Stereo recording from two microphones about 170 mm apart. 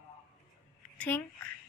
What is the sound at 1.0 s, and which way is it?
Speech, 10° left (ahead or behind).